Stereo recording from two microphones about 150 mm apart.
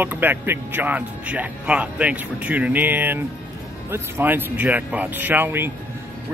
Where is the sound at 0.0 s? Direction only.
10° right (ahead or behind).